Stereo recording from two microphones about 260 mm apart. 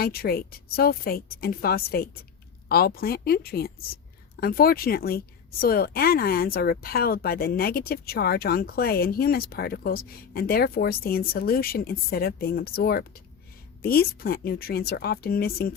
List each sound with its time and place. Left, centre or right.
0.0 s speech: left